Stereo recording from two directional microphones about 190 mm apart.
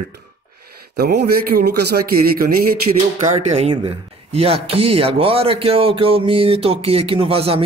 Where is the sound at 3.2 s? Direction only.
35° right (ahead or behind).